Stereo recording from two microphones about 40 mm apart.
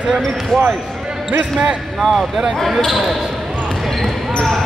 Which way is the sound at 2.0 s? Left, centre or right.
Centre.